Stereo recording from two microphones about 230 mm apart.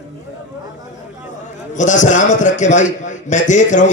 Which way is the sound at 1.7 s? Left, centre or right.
Left.